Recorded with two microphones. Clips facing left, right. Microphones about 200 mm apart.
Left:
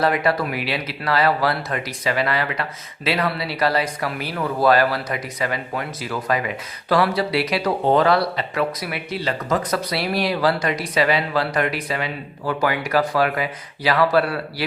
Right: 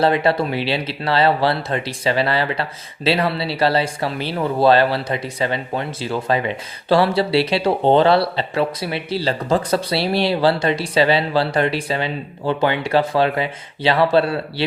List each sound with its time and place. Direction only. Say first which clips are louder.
0.0 s speech: right 3 dB; 30° right (ahead or behind)